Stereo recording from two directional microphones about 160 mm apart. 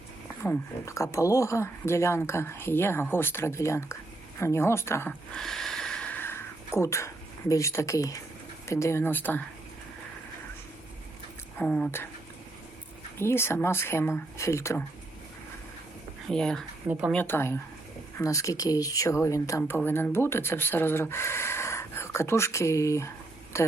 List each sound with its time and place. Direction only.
0.4 s speech: 15° left (ahead or behind)
5.3 s a sound: centre (ahead or behind); by 8.2 s 20° left (ahead or behind)
8.6 s speech: 20° left (ahead or behind)
11.6 s speech: 5° left (ahead or behind)
13.1 s speech: 15° left (ahead or behind)
16.3 s speech: 5° left (ahead or behind)
23.5 s a sound: 15° left (ahead or behind)